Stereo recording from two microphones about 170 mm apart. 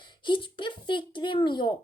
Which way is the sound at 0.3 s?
30° left (ahead or behind).